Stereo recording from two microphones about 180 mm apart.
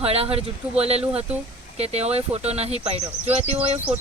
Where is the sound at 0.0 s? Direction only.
35° right (ahead or behind).